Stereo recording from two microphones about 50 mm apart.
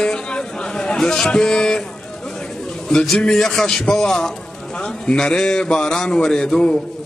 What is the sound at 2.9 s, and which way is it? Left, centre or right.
A man's voice, centre.